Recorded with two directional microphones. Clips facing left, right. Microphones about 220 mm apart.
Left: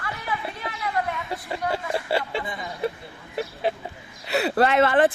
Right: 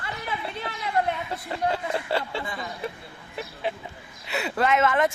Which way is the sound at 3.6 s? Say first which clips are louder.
Left 4 dB; 40° left (ahead or behind).